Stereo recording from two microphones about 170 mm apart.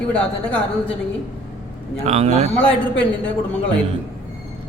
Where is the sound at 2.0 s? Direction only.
40° right (ahead or behind).